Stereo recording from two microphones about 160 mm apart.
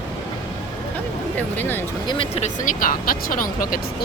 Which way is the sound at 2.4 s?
50° left (ahead or behind).